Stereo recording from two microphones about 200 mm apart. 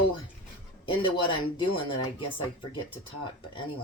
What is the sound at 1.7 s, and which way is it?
Speech, 25° left (ahead or behind).